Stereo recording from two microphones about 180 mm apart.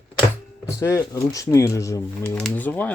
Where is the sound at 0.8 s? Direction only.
15° left (ahead or behind).